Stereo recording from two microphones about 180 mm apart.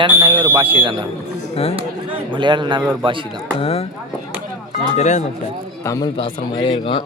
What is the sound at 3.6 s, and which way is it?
Speech, 35° left (ahead or behind).